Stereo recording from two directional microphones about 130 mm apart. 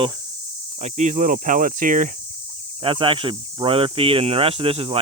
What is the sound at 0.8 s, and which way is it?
Cricket, 65° right (ahead or behind).